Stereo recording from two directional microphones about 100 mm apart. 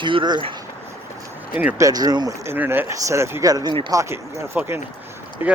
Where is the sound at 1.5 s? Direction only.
15° right (ahead or behind).